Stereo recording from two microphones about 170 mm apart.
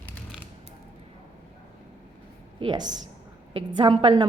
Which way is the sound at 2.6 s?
25° right (ahead or behind).